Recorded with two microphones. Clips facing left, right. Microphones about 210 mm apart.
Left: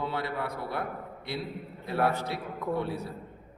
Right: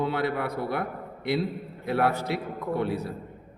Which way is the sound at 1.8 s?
75° right (ahead or behind).